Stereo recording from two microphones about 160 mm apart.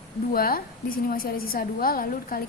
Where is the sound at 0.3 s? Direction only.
65° left (ahead or behind).